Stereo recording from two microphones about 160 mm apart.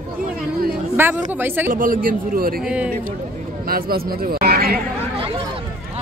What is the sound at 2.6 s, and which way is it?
Speech, 5° right (ahead or behind).